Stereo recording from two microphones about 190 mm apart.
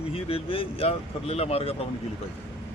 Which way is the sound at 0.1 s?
30° left (ahead or behind).